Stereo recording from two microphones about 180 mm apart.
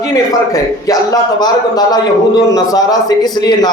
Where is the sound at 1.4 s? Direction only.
20° left (ahead or behind).